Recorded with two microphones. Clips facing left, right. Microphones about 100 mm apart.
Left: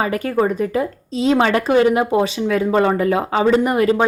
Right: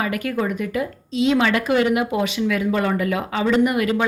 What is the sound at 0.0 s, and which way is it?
Speech, 35° left (ahead or behind).